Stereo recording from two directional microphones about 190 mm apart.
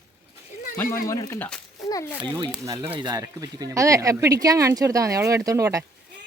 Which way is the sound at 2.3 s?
20° right (ahead or behind).